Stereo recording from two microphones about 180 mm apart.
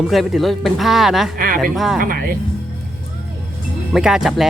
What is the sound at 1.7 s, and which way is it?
Speech, centre (ahead or behind).